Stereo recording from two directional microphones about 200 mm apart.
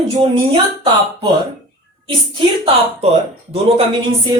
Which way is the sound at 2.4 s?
25° right (ahead or behind).